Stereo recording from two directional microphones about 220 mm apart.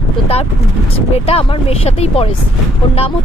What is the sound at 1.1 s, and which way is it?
Speech, 25° left (ahead or behind).